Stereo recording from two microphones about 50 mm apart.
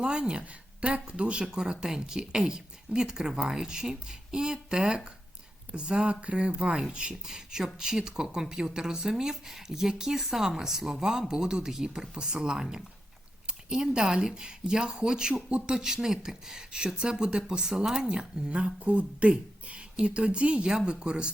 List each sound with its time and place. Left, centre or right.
0.0 s speech: centre
1.8 s speech: centre